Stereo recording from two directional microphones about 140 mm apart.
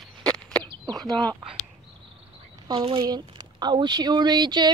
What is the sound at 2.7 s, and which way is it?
Speech, 35° right (ahead or behind).